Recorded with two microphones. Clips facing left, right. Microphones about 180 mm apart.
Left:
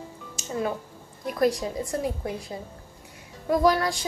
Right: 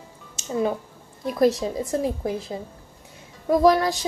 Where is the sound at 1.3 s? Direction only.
25° right (ahead or behind).